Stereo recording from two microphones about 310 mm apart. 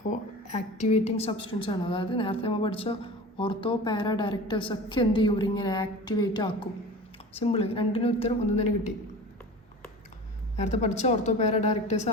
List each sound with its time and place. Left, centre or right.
0.1 s a woman's voice: left
10.6 s a woman's voice: left